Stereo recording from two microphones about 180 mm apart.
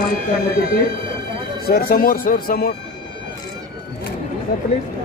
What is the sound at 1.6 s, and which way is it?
Speech, 55° left (ahead or behind).